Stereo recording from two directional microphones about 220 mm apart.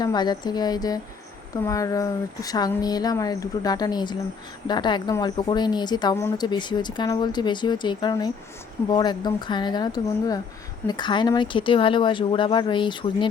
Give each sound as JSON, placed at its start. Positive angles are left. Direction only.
{"t": 0.0, "sound": "a woman's voice", "side_deg": 20}